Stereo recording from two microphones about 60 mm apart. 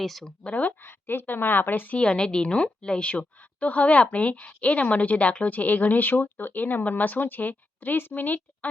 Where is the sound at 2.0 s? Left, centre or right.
Centre.